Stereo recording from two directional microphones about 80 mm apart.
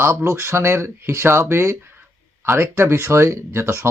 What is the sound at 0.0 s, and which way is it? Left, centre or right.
Speech, right.